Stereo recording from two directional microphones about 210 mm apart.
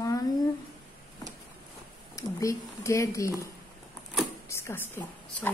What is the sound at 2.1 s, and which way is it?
Speech, 15° left (ahead or behind).